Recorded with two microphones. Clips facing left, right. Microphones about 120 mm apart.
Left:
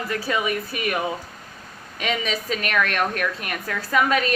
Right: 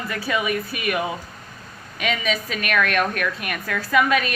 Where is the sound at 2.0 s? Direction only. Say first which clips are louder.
Right 1 dB; 30° left (ahead or behind).